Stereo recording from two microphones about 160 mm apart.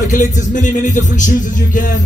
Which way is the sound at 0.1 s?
50° left (ahead or behind).